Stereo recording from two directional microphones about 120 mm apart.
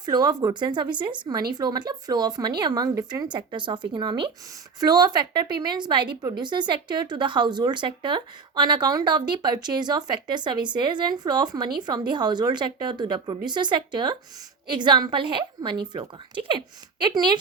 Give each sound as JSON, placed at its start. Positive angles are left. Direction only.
{"t": 0.0, "sound": "speech", "side_deg": -35}